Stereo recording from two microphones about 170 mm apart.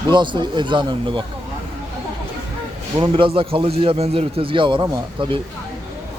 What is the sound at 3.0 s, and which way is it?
A man's voice, 30° right (ahead or behind).